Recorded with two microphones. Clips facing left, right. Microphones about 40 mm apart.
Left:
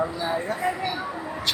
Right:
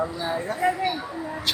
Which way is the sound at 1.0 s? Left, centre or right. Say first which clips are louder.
Even; centre.